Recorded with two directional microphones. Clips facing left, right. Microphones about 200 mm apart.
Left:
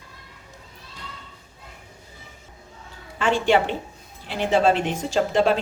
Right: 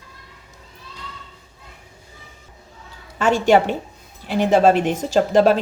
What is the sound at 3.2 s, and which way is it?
A woman's voice, 45° right (ahead or behind).